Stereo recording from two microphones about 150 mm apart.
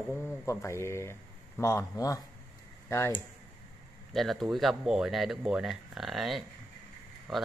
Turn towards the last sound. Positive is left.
turn(degrees=0)  # may be behind; listen again after turning